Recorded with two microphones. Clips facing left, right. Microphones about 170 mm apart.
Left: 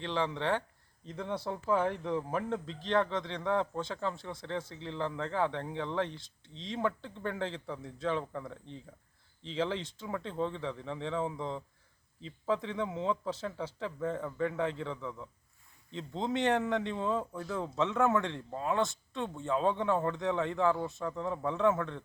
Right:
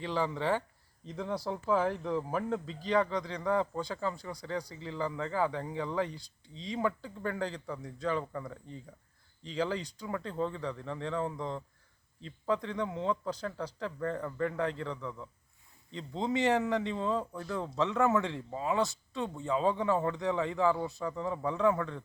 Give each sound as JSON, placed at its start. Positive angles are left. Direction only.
{"t": 0.0, "sound": "speech", "side_deg": 0}